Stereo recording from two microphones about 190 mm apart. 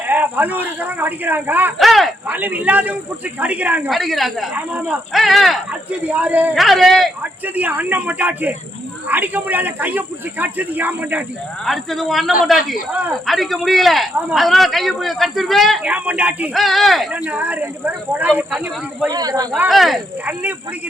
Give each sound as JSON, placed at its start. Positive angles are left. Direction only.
{"t": 0.1, "sound": "a man's voice", "side_deg": -10}
{"t": 19.0, "sound": "speech", "side_deg": -20}
{"t": 19.5, "sound": "speech", "side_deg": 0}